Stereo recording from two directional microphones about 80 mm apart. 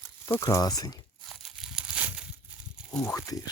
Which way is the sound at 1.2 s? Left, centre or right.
Centre.